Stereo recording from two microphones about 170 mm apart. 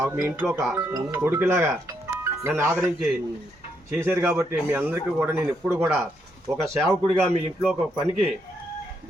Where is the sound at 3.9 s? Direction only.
15° right (ahead or behind).